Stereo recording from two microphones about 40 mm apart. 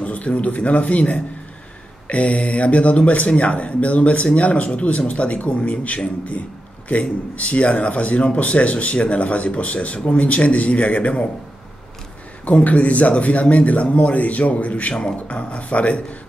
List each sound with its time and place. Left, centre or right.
0.0 s a man's voice: left
12.4 s speech: left